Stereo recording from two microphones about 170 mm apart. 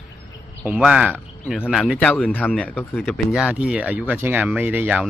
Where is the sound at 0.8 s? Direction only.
5° right (ahead or behind); by 3.2 s 10° left (ahead or behind).